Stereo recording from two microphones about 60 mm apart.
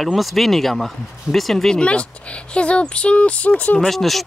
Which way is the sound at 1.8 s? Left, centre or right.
Centre.